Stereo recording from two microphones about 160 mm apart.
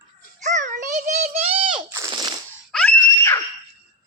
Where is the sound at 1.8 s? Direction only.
20° right (ahead or behind).